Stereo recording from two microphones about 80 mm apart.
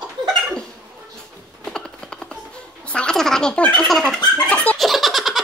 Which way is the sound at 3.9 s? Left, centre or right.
Centre.